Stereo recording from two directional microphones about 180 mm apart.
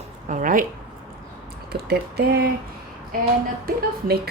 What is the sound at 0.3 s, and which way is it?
Speech, 45° right (ahead or behind).